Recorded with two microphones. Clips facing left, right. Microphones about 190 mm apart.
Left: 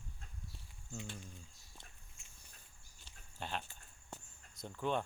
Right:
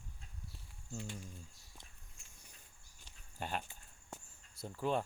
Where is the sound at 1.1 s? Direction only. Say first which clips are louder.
Right 2 dB; 10° right (ahead or behind).